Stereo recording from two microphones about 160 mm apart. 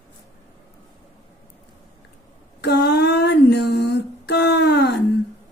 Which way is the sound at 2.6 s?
90° left.